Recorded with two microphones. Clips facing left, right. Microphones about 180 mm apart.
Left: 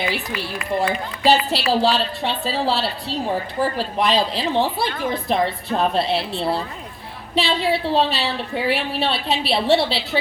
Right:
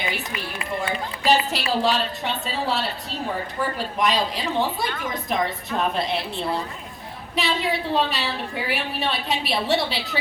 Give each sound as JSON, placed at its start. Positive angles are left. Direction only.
{"t": 0.1, "sound": "a woman's voice", "side_deg": 30}